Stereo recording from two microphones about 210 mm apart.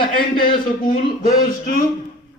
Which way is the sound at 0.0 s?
45° left (ahead or behind).